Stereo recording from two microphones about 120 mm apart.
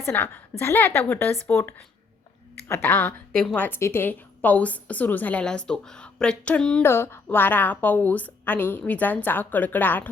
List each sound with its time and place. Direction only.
0.0 s a woman's voice: 20° left (ahead or behind)
6.8 s a woman's voice: 20° left (ahead or behind)